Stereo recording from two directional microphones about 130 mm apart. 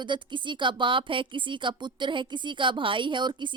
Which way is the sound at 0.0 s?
35° right (ahead or behind).